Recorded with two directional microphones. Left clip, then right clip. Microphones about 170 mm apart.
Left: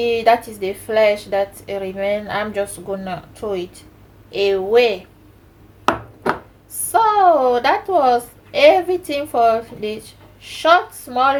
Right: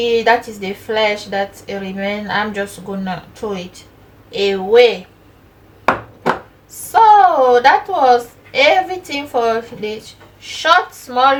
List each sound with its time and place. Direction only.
0.1 s a woman's voice: 45° left (ahead or behind)
6.9 s a woman's voice: 45° left (ahead or behind)